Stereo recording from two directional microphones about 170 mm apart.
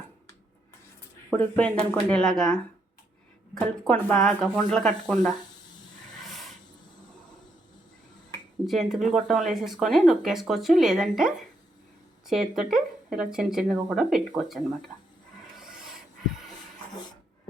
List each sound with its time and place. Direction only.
1.3 s speech: 10° left (ahead or behind)
8.6 s speech: centre (ahead or behind)